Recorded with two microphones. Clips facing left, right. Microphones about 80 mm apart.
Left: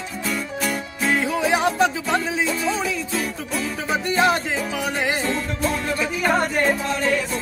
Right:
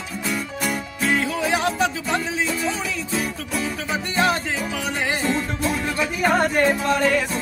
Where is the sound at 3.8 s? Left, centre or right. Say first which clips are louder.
Left 3 dB; centre.